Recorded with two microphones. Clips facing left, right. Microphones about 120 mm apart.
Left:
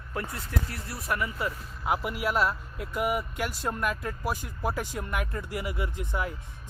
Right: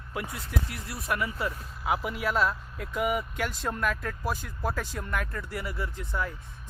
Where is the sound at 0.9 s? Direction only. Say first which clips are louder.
Even; 25° left (ahead or behind).